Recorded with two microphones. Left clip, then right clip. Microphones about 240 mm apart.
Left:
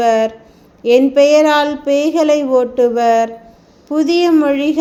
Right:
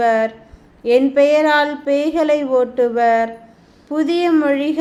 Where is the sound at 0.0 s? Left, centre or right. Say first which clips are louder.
Left 3 dB; centre.